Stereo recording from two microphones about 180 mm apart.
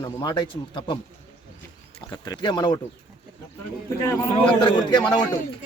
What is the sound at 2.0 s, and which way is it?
Speech, 20° left (ahead or behind).